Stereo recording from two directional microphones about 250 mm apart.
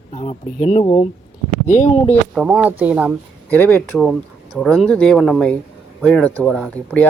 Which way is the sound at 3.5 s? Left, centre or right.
Centre.